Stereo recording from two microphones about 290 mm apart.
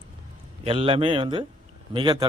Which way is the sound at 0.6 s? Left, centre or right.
Centre.